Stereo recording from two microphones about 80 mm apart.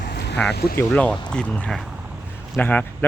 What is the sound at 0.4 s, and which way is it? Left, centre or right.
Speech, centre.